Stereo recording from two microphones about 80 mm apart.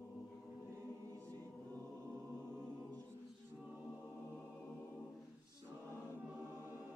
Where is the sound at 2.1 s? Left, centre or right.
Centre.